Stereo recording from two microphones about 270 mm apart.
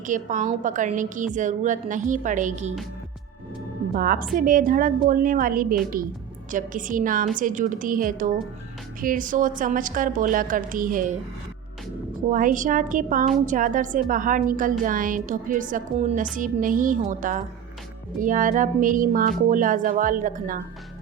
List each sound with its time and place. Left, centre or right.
0.0 s a woman's voice: right
3.9 s a woman's voice: right
12.3 s a woman's voice: right